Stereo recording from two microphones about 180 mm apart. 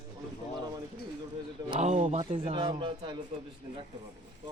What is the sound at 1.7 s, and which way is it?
A man's voice, 40° right (ahead or behind).